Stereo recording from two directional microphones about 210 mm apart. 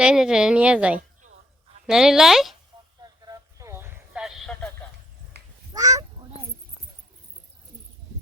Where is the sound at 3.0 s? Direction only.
15° right (ahead or behind); by 4.7 s centre (ahead or behind).